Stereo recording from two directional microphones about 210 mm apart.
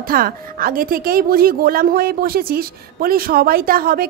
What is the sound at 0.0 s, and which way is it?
Speech, 45° right (ahead or behind).